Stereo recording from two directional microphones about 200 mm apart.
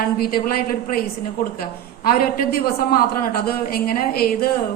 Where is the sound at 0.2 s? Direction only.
45° left (ahead or behind).